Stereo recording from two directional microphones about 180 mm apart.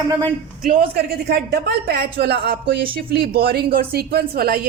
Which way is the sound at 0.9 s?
65° right (ahead or behind).